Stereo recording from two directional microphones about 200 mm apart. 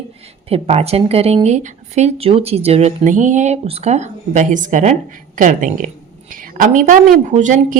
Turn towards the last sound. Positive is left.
turn(degrees=-40)  # may be behind; listen again after turning